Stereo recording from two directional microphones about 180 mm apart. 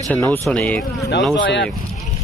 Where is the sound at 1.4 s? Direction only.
85° left.